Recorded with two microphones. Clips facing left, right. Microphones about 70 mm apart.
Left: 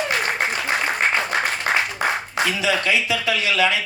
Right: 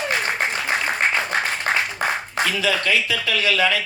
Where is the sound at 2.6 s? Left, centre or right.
Centre.